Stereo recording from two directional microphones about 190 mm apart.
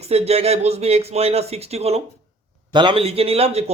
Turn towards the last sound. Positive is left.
turn(degrees=-35)  # may be behind; listen again after turning